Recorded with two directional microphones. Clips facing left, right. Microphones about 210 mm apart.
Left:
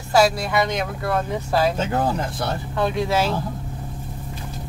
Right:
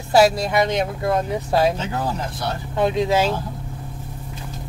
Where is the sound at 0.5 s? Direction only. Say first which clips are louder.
Right 2 dB; 25° right (ahead or behind).